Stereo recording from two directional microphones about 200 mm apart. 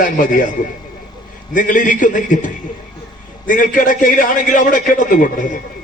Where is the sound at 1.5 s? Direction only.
40° left (ahead or behind).